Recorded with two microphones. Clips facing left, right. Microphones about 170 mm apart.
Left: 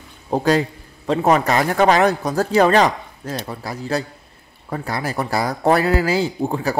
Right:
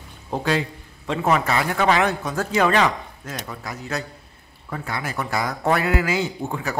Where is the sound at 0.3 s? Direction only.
40° left (ahead or behind).